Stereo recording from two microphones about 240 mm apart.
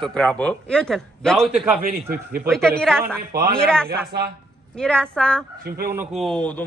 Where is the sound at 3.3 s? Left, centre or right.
Right.